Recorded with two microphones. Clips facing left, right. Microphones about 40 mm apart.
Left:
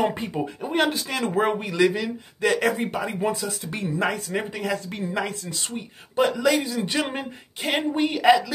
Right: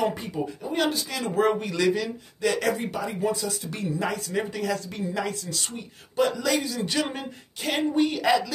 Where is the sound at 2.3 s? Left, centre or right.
Left.